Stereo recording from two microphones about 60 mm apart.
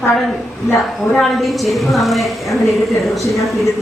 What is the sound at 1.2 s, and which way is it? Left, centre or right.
A woman's voice, centre.